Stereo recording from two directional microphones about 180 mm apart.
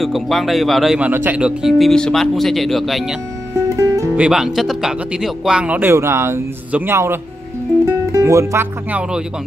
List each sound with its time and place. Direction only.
0.0 s speech: centre (ahead or behind)
3.7 s music: 20° right (ahead or behind)
4.2 s speech: centre (ahead or behind)